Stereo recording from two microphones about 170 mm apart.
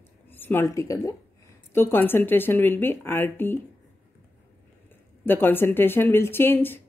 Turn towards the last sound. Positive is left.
turn(degrees=10)  # may be behind; listen again after turning